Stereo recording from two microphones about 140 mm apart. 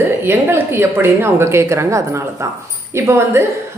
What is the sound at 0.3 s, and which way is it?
A woman's voice, 15° right (ahead or behind).